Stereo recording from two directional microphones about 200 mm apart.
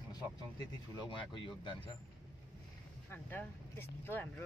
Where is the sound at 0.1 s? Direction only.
20° left (ahead or behind).